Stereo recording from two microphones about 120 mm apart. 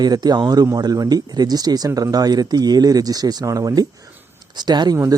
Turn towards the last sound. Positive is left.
turn(degrees=-35)  # may be behind; listen again after turning